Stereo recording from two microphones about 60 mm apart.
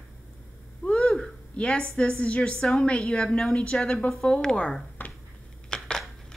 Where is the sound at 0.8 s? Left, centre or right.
Centre.